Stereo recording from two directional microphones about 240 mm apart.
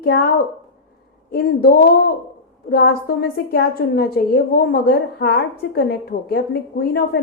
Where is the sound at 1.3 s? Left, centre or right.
Left.